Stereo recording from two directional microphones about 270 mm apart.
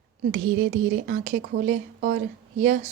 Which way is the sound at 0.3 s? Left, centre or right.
Right.